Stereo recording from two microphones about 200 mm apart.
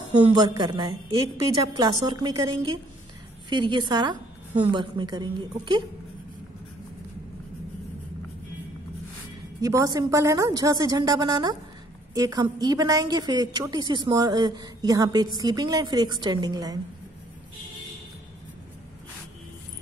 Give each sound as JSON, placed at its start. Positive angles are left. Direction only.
{"t": 0.3, "sound": "a woman's voice", "side_deg": -20}
{"t": 9.6, "sound": "a woman's voice", "side_deg": -15}